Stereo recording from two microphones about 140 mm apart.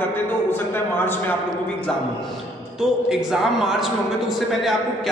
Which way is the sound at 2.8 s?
5° right (ahead or behind).